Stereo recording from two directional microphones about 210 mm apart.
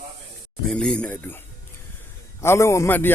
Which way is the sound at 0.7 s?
5° left (ahead or behind).